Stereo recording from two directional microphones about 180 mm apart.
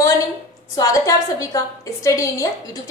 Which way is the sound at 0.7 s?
20° left (ahead or behind).